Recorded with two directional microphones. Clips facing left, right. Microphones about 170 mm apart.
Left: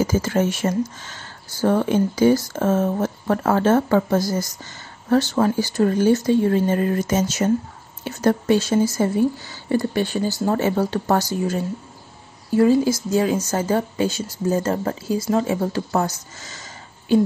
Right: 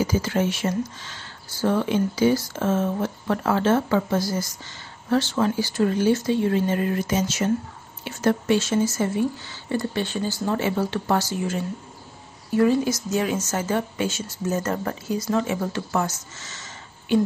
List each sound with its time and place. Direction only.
0.0 s speech: 45° left (ahead or behind)
12.5 s speech: 30° left (ahead or behind)